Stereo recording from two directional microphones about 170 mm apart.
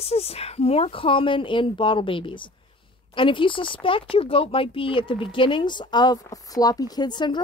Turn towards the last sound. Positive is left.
turn(degrees=25)  # may be behind; listen again after turning